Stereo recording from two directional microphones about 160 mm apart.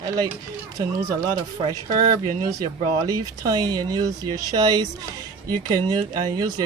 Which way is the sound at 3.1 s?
25° right (ahead or behind).